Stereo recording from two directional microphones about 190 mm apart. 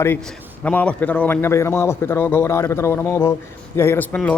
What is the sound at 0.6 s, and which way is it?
A man's voice, 5° left (ahead or behind).